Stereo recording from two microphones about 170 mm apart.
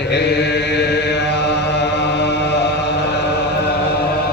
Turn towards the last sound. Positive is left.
turn(degrees=80)